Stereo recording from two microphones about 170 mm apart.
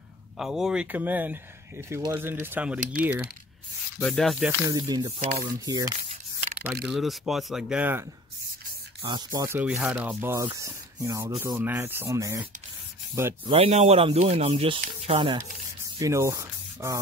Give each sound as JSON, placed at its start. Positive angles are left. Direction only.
{"t": 0.4, "sound": "speech", "side_deg": -5}
{"t": 4.0, "sound": "speech", "side_deg": 0}
{"t": 4.5, "sound": "speech", "side_deg": -20}
{"t": 5.2, "sound": "speech", "side_deg": -50}
{"t": 5.7, "sound": "speech", "side_deg": -20}
{"t": 6.9, "sound": "speech", "side_deg": 0}
{"t": 9.0, "sound": "speech", "side_deg": -25}
{"t": 9.6, "sound": "speech", "side_deg": -10}
{"t": 13.5, "sound": "speech", "side_deg": -35}
{"t": 16.0, "sound": "speech", "side_deg": -15}